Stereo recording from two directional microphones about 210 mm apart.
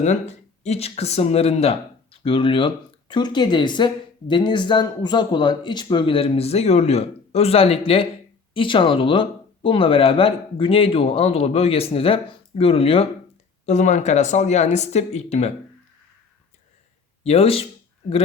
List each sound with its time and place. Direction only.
0.0 s speech: 35° left (ahead or behind)
17.2 s speech: 30° left (ahead or behind)